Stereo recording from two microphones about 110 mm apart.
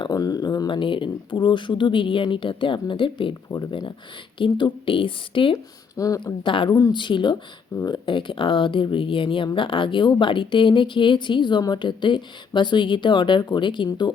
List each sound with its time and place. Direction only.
0.0 s speech: 35° left (ahead or behind)
0.8 s speech: 50° left (ahead or behind)
3.5 s speech: 40° left (ahead or behind)
6.0 s speech: 30° left (ahead or behind)
6.4 s speech: 50° left (ahead or behind)
6.7 s speech: 30° left (ahead or behind)
6.9 s speech: 45° left (ahead or behind)